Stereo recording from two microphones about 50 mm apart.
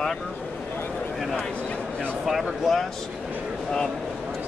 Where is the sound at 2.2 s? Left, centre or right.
Centre.